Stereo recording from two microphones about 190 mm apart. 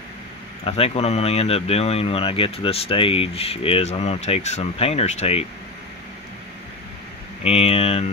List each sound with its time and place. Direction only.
0.7 s speech: 30° left (ahead or behind)
7.4 s speech: 30° left (ahead or behind)